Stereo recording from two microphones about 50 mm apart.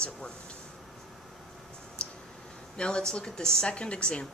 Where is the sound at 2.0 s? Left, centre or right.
Centre.